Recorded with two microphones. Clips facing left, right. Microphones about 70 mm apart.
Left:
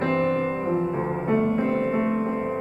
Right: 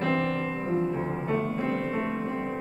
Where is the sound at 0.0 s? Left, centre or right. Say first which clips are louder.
Left 4 dB; left.